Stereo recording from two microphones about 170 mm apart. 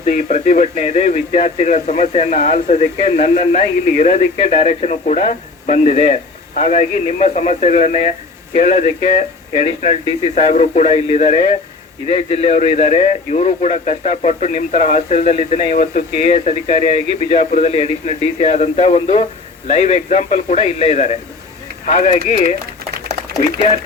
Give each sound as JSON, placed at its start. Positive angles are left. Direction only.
{"t": 0.0, "sound": "a man's voice", "side_deg": 45}